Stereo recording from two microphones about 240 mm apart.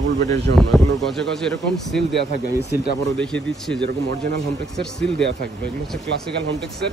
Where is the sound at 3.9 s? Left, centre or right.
Right.